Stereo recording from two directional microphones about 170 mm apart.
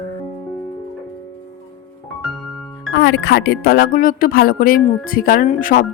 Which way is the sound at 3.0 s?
90° left.